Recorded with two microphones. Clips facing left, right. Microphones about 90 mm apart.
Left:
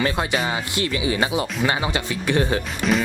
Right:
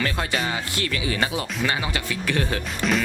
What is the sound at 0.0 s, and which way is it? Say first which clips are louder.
Speech: left 3 dB; 20° left (ahead or behind).